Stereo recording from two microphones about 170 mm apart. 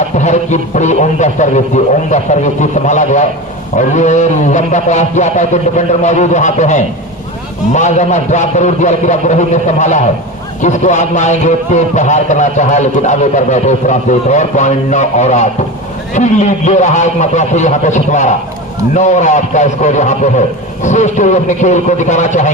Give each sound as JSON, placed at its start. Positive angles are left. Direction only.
{"t": 0.2, "sound": "a man's voice", "side_deg": 45}